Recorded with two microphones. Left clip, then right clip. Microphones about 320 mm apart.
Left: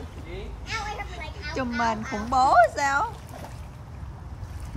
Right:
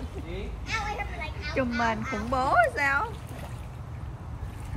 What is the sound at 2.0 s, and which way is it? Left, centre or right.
Speech, left.